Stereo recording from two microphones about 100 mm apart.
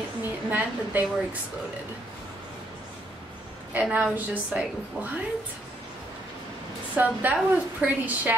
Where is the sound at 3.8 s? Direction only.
15° right (ahead or behind).